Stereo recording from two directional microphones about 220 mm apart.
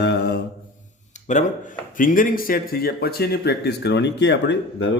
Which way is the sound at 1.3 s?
35° left (ahead or behind).